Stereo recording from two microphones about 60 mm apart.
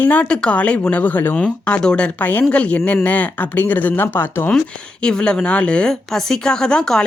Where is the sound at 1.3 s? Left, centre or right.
Centre.